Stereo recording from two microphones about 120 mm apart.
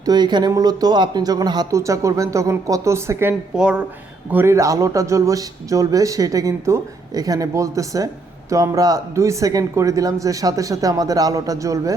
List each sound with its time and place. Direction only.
0.0 s speech: 35° right (ahead or behind)
3.5 s speech: 5° right (ahead or behind)
4.3 s speech: 20° right (ahead or behind)